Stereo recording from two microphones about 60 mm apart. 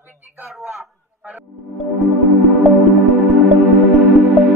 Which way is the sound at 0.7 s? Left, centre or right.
Centre.